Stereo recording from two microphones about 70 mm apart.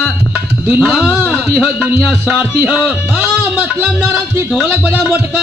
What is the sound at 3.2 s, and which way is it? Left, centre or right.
Music, centre.